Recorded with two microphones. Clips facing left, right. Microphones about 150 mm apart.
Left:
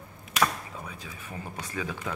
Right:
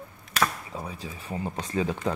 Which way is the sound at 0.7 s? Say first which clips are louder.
Right 5 dB; 35° right (ahead or behind).